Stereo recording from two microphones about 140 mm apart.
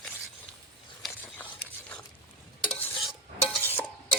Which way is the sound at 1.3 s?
10° left (ahead or behind).